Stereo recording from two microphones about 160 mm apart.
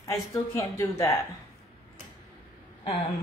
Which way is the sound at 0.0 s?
20° left (ahead or behind).